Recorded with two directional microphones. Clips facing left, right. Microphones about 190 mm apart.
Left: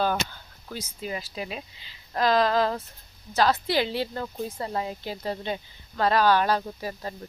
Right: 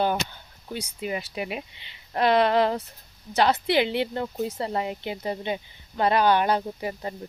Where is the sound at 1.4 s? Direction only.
15° right (ahead or behind).